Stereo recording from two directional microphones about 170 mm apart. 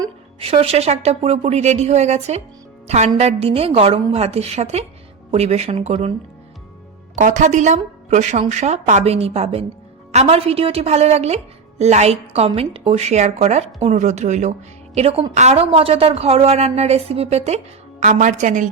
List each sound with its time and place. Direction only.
0.3 s a woman's voice: 35° right (ahead or behind)
7.2 s a woman's voice: 50° right (ahead or behind)